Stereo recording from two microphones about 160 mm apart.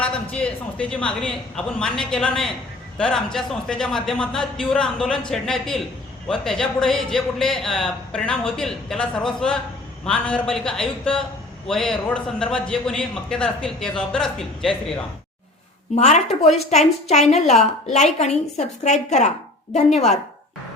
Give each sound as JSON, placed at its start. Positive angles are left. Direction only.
{"t": 0.3, "sound": "a man's voice", "side_deg": 10}
{"t": 16.0, "sound": "a woman's voice", "side_deg": 45}